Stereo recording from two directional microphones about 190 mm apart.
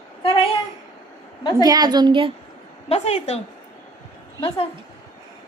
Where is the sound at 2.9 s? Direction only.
35° left (ahead or behind).